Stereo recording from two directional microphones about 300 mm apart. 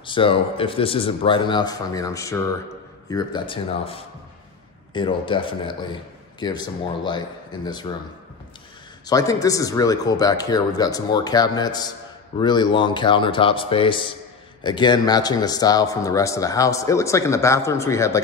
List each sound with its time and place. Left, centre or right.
0.0 s a man's voice: centre
9.0 s a man's voice: centre